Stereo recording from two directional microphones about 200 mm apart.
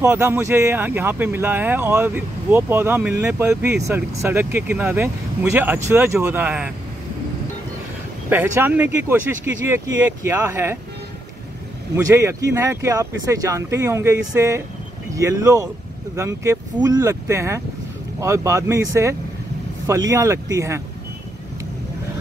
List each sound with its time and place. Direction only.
0.0 s speech: 10° right (ahead or behind)
8.3 s speech: 10° right (ahead or behind)
12.2 s speech: 15° right (ahead or behind)